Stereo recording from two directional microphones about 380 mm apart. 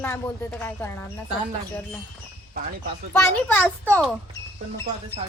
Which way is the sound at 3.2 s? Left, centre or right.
Centre.